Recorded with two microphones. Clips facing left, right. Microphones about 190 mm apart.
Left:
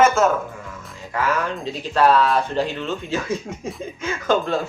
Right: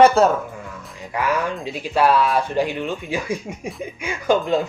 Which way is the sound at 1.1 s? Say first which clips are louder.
Right 1 dB; 15° right (ahead or behind).